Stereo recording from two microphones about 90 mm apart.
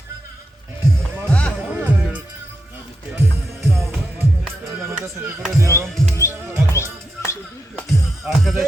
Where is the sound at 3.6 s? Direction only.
30° right (ahead or behind).